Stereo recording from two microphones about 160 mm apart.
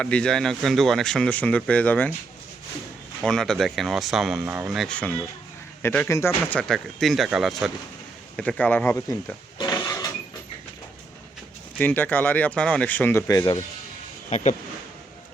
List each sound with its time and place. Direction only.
0.0 s speech: 5° left (ahead or behind)
3.2 s speech: 5° left (ahead or behind)
8.4 s speech: 10° left (ahead or behind)
11.8 s speech: 10° left (ahead or behind)
14.3 s speech: 45° left (ahead or behind)